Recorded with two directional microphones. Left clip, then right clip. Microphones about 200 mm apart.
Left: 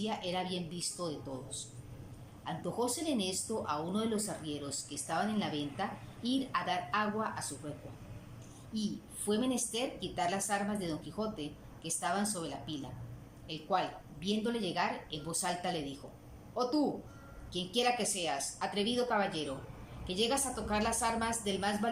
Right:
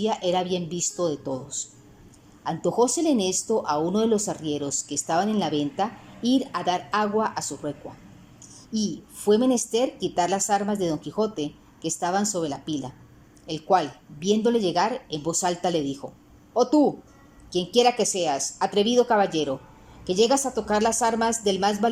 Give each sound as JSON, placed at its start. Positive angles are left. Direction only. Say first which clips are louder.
{"t": 0.0, "sound": "a woman's voice", "louder": "right 12 dB", "side_deg": -40}
{"t": 8.7, "sound": "a woman's voice", "louder": "right 11 dB", "side_deg": -40}